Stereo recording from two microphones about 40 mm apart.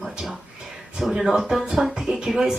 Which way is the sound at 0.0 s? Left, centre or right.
Centre.